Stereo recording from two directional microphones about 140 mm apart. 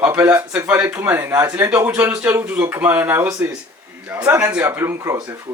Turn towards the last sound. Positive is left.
turn(degrees=-20)  # may be behind; listen again after turning